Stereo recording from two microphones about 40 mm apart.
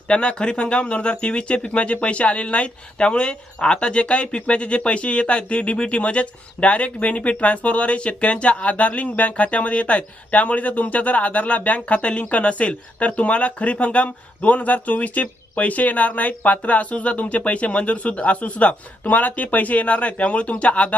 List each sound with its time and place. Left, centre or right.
0.1 s speech: left